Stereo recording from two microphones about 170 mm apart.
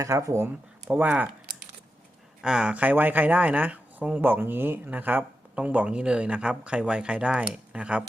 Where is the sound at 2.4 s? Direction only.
5° right (ahead or behind).